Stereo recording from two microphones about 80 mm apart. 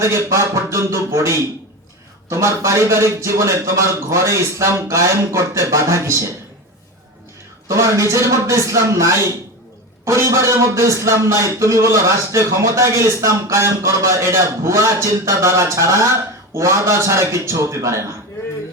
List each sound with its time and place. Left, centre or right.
0.0 s speech: right
7.7 s speech: right